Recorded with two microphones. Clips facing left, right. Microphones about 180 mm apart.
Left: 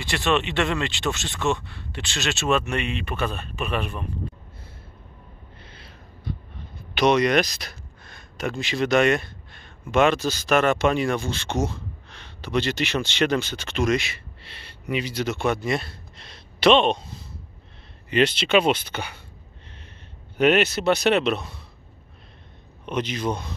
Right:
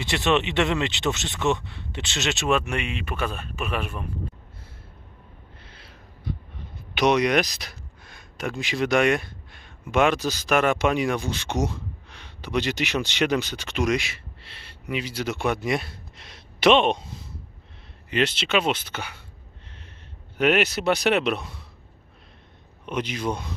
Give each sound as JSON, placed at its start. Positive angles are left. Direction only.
{"t": 0.0, "sound": "speech", "side_deg": -20}
{"t": 5.6, "sound": "a sound", "side_deg": -5}
{"t": 7.0, "sound": "speech", "side_deg": -10}
{"t": 18.1, "sound": "speech", "side_deg": 0}
{"t": 20.3, "sound": "speech", "side_deg": -5}
{"t": 22.8, "sound": "speech", "side_deg": -5}